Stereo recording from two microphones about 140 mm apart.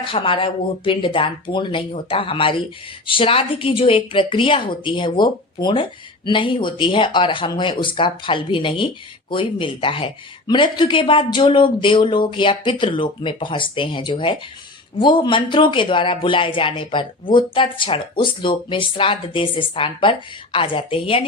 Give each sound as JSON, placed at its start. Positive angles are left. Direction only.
{"t": 0.0, "sound": "speech", "side_deg": 40}